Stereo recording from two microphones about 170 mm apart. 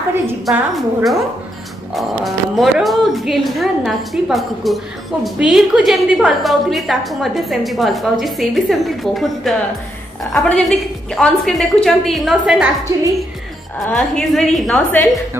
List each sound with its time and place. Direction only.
0.5 s a woman's voice: centre (ahead or behind)
12.9 s a woman's voice: 20° right (ahead or behind)
13.8 s a woman's voice: 5° left (ahead or behind)